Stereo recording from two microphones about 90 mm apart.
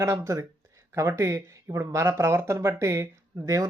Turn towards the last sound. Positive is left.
turn(degrees=-40)  # may be behind; listen again after turning